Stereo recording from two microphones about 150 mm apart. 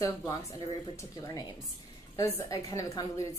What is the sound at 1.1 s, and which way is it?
A woman's voice, 25° left (ahead or behind).